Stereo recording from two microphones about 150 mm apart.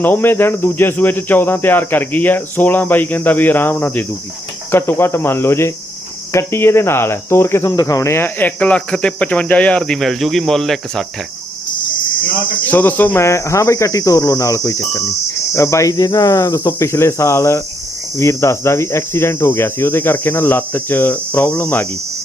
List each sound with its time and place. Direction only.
0.0 s cricket: 15° left (ahead or behind)
12.6 s cricket: 10° left (ahead or behind)